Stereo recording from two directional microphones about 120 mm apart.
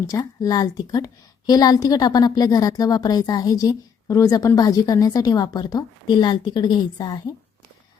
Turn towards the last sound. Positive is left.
turn(degrees=35)  # may be behind; listen again after turning